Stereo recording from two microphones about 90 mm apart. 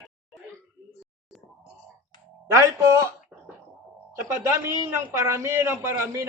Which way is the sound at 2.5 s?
35° right (ahead or behind).